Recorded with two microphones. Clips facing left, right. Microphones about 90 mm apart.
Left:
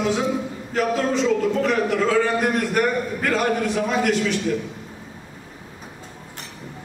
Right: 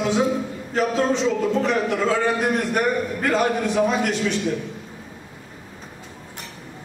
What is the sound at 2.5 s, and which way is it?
A man's voice, 5° right (ahead or behind).